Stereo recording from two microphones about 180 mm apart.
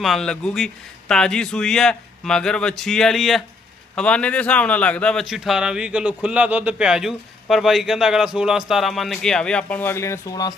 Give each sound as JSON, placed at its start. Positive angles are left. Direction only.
{"t": 0.0, "sound": "a man's voice", "side_deg": 0}